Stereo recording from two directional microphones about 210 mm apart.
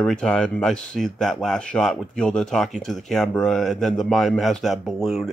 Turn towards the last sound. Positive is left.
turn(degrees=0)  # may be behind; listen again after turning